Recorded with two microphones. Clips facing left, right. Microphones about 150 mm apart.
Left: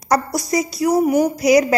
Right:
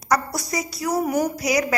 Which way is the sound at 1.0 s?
10° left (ahead or behind).